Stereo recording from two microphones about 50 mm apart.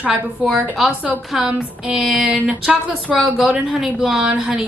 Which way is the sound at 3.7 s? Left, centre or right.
Centre.